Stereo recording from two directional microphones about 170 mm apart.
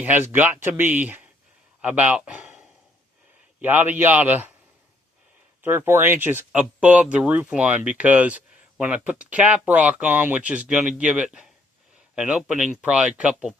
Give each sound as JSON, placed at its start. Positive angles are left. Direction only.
{"t": 0.0, "sound": "speech", "side_deg": -10}
{"t": 5.6, "sound": "speech", "side_deg": -15}